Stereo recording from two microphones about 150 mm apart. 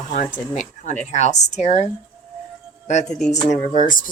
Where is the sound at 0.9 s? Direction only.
50° left (ahead or behind).